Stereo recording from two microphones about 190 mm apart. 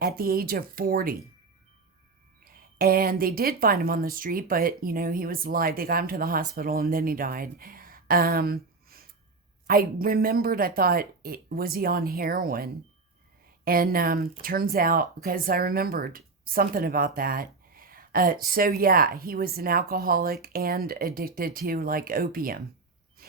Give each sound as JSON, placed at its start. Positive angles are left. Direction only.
{"t": 0.0, "sound": "speech", "side_deg": -50}
{"t": 2.4, "sound": "speech", "side_deg": -50}